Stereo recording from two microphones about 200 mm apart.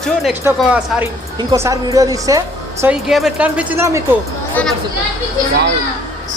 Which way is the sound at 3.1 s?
Centre (ahead or behind).